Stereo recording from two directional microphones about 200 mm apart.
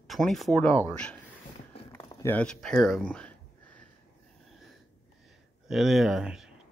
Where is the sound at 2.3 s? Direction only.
5° left (ahead or behind).